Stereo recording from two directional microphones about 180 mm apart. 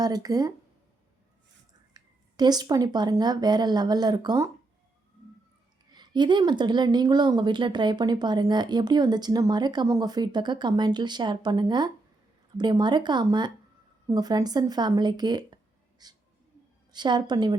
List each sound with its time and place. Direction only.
0.0 s a woman's voice: 20° right (ahead or behind)
1.9 s speech: 20° right (ahead or behind)
5.9 s a woman's voice: 25° right (ahead or behind)
16.0 s a sound: 20° right (ahead or behind)
16.9 s a woman's voice: 25° right (ahead or behind)